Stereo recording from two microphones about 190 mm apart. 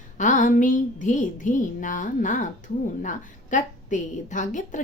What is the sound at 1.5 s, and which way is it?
Speech, 40° left (ahead or behind).